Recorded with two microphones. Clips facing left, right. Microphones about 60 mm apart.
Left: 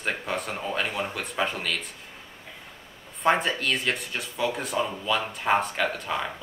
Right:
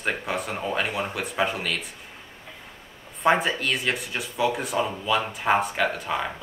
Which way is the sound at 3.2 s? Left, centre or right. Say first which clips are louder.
Right 2 dB; centre.